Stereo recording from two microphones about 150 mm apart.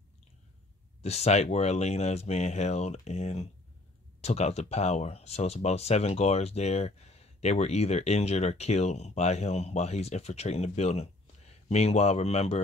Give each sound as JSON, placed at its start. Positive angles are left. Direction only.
{"t": 1.0, "sound": "speech", "side_deg": 45}